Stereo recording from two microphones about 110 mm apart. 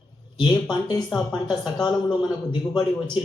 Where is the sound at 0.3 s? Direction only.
40° left (ahead or behind).